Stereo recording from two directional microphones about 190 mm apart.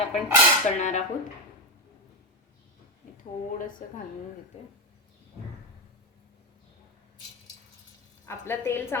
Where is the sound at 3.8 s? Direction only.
45° left (ahead or behind).